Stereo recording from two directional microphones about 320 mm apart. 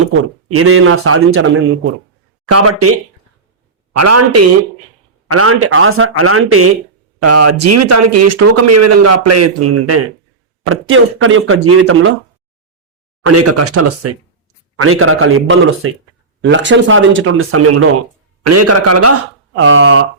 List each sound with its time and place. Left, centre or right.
0.5 s speech: right
3.9 s speech: right
13.2 s speech: right